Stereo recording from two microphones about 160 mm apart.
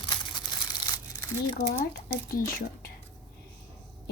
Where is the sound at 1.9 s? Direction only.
90° left.